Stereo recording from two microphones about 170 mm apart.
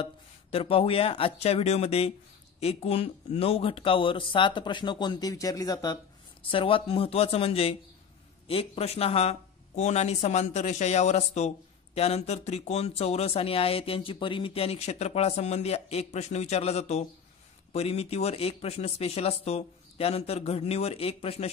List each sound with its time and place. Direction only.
0.0 s speech: 35° left (ahead or behind)